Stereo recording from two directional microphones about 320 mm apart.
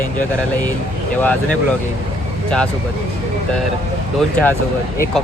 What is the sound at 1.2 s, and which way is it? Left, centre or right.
Speech, centre.